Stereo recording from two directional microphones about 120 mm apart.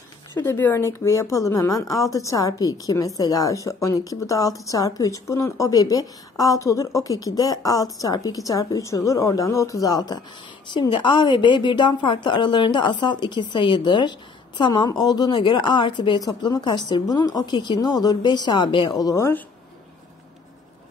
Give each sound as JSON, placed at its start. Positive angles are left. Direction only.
{"t": 0.4, "sound": "a woman's voice", "side_deg": 15}